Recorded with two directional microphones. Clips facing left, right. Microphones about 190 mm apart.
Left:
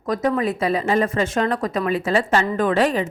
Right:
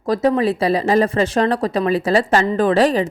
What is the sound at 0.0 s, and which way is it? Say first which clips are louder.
Speech: right 4 dB; 30° right (ahead or behind).